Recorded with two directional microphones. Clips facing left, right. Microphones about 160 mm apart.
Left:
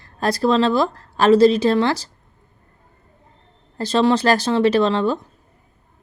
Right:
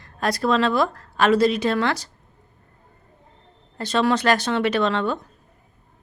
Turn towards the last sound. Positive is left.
turn(degrees=30)  # may be behind; listen again after turning